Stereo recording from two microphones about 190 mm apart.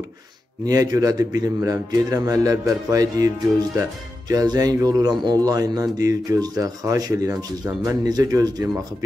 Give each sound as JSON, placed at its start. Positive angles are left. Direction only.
{"t": 0.7, "sound": "speech", "side_deg": -20}